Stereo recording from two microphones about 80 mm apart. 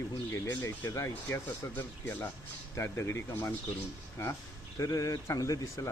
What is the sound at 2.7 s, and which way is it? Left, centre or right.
Speech, left.